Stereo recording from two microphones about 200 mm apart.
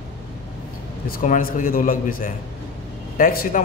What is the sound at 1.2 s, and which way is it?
A man's voice, 45° left (ahead or behind).